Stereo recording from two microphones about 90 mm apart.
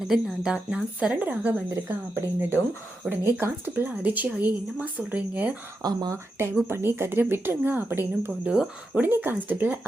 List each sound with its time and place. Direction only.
0.1 s a woman's voice: 5° right (ahead or behind)
1.1 s a woman's voice: 15° right (ahead or behind)
5.8 s speech: 50° right (ahead or behind)
6.4 s speech: 30° right (ahead or behind)
8.3 s speech: 10° right (ahead or behind)